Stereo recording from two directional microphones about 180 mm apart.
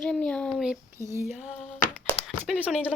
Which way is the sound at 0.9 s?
15° right (ahead or behind).